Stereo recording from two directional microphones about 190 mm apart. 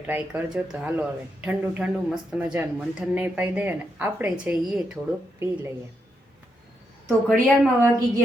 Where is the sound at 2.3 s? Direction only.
5° right (ahead or behind).